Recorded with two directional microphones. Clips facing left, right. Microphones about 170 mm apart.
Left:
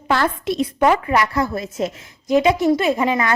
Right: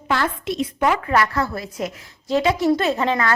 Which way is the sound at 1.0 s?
15° left (ahead or behind).